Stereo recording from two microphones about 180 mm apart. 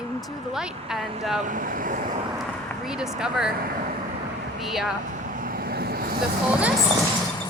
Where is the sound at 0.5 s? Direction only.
Centre (ahead or behind).